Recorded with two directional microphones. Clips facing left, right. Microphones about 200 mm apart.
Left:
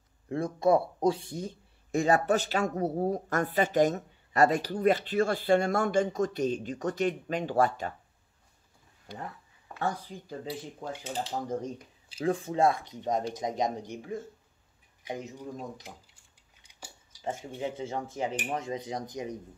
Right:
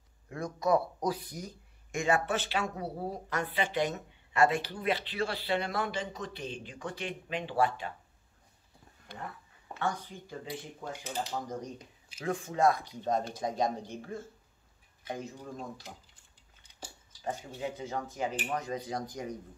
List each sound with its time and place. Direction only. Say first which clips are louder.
0.3 s speech: left 4 dB; 30° left (ahead or behind)
9.8 s speech: left 2 dB; 35° left (ahead or behind); by 15.3 s 20° left (ahead or behind)
17.2 s speech: left 2 dB; 25° left (ahead or behind)